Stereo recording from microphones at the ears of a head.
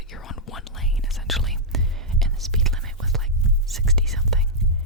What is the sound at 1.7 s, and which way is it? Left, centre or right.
Whispering, right.